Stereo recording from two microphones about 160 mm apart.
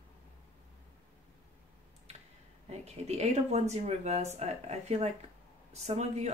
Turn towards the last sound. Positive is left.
turn(degrees=-45)  # may be behind; listen again after turning